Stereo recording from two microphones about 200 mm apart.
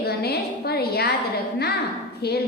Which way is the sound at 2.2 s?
55° left (ahead or behind).